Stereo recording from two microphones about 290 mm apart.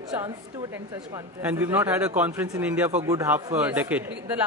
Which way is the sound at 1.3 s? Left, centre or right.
Centre.